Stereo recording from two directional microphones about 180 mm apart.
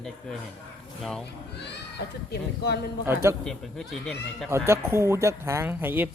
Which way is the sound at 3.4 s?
Centre (ahead or behind).